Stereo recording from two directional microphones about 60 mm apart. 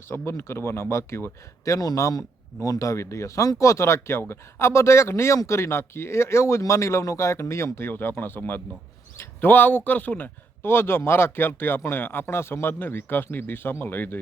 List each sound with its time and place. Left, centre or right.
0.1 s speech: left
10.7 s a man's voice: left